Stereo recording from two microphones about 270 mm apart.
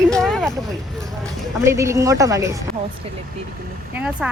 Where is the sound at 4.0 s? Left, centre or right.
Centre.